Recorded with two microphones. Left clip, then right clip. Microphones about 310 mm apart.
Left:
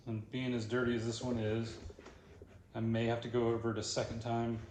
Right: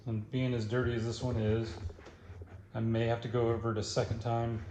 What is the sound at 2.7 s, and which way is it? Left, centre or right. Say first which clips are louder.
Speech: right 3 dB; right.